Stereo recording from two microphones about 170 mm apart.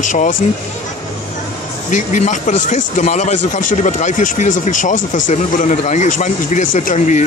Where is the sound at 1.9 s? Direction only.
45° left (ahead or behind).